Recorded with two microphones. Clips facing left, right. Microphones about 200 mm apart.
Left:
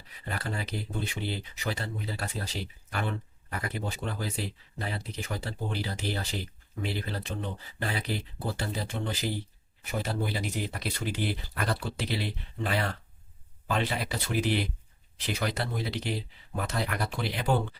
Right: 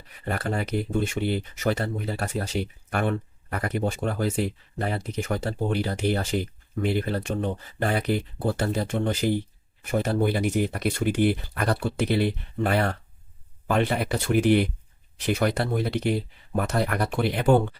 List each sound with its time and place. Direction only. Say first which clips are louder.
0.3 s speech: right 8 dB; 50° right (ahead or behind)